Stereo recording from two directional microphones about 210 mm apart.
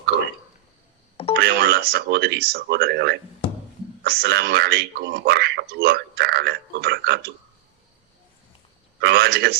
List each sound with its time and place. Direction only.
1.4 s speech: 50° right (ahead or behind)
9.0 s speech: 50° right (ahead or behind)